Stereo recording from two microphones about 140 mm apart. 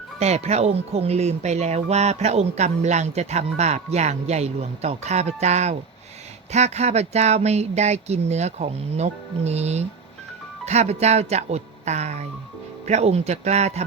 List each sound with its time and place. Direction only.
0.2 s speech: 50° right (ahead or behind)